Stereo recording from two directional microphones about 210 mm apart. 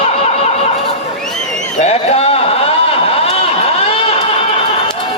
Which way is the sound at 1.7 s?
30° left (ahead or behind).